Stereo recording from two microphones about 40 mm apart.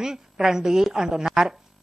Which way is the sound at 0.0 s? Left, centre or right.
Centre.